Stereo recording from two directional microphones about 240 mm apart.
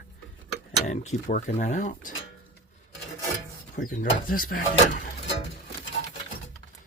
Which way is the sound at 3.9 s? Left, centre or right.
Left.